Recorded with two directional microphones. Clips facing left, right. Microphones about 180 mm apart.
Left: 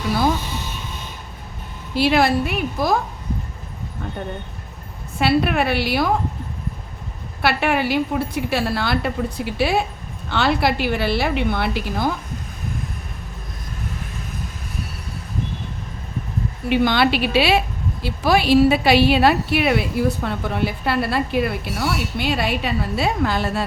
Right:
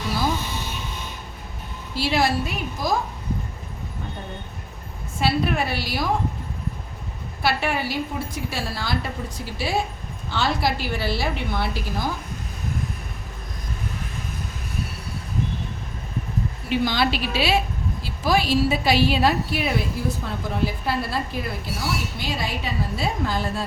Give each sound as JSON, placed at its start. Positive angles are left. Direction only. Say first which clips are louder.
{"t": 2.0, "sound": "a woman's voice", "louder": "left 5 dB", "side_deg": 60}
{"t": 5.2, "sound": "a woman's voice", "louder": "left 4 dB", "side_deg": 65}
{"t": 7.4, "sound": "a woman's voice", "louder": "left 4 dB", "side_deg": 65}
{"t": 16.6, "sound": "a woman's voice", "louder": "left 5 dB", "side_deg": 65}